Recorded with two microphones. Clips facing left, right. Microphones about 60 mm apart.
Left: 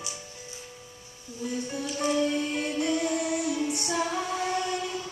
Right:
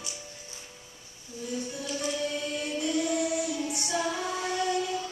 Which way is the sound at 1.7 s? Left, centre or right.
Left.